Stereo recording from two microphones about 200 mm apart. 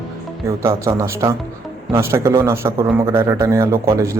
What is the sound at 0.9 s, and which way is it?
A man's voice, 15° right (ahead or behind).